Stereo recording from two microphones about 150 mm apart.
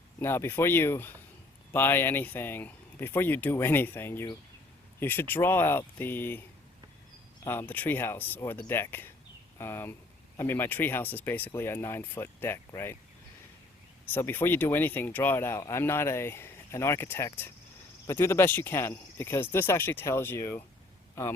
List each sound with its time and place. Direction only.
0.2 s speech: 15° left (ahead or behind)
7.4 s speech: 15° left (ahead or behind)
14.1 s speech: 15° left (ahead or behind)